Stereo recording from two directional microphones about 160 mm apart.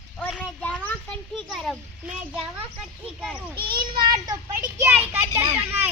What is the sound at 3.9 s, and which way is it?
Speech, 25° right (ahead or behind).